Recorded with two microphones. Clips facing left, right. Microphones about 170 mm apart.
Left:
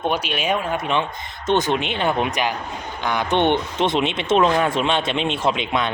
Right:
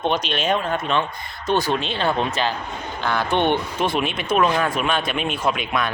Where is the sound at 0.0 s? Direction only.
10° left (ahead or behind).